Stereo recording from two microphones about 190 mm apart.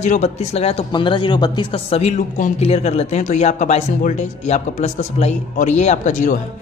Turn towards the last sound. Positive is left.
turn(degrees=45)  # may be behind; listen again after turning